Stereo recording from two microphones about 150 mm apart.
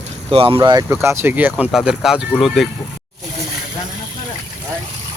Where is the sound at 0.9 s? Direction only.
15° right (ahead or behind).